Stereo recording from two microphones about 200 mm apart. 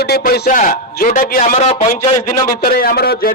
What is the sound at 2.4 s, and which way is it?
Speech, 45° left (ahead or behind).